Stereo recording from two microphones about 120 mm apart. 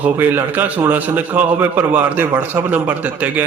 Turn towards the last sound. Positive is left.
turn(degrees=-15)  # may be behind; listen again after turning